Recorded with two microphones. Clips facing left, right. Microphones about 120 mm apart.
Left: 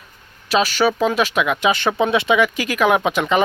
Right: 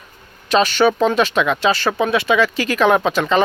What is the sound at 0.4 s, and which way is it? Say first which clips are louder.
Speech: right 3 dB; 5° left (ahead or behind).